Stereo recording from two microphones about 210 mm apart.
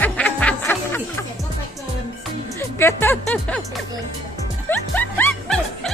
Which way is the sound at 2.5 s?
10° left (ahead or behind).